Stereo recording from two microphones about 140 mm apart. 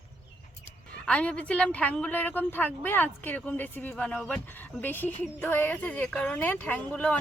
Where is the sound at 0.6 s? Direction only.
10° left (ahead or behind).